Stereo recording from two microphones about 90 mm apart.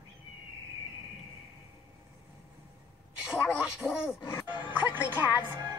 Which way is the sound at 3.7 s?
5° right (ahead or behind).